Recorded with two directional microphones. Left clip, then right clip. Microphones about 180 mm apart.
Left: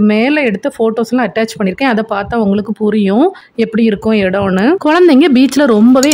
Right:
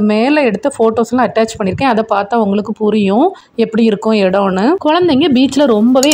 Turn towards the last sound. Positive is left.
turn(degrees=20)  # may be behind; listen again after turning